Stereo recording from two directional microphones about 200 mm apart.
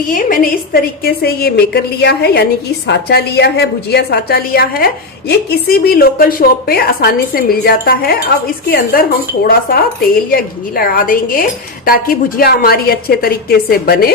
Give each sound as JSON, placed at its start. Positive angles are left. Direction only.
{"t": 0.1, "sound": "a woman's voice", "side_deg": 45}